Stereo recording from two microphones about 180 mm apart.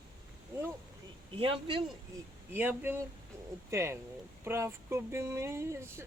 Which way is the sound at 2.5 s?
10° right (ahead or behind).